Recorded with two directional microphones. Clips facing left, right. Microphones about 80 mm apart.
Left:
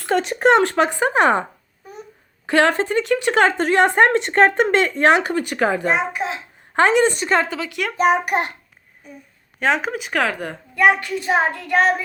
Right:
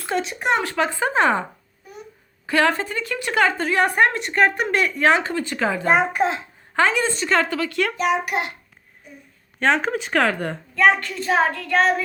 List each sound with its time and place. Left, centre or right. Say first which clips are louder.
0.1 s speech: left 6 dB; left
0.8 s a woman's voice: left 3 dB; left
2.5 s a woman's voice: left 3 dB; left
5.9 s a child's voice: right 3 dB; right
6.7 s a woman's voice: left 5 dB; left
7.3 s child singing: left 1 dB; left
7.9 s a child's voice: left 9 dB; left
9.6 s speech: even; centre
10.8 s child singing: left 1 dB; centre